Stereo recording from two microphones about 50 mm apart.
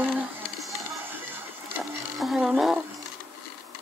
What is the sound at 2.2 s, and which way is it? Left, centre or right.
Speech, centre.